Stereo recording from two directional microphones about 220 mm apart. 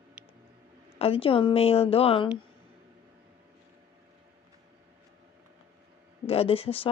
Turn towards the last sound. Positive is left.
turn(degrees=25)  # may be behind; listen again after turning